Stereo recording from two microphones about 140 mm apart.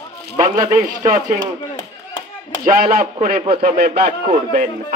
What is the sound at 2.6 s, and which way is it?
Speech, 75° right (ahead or behind).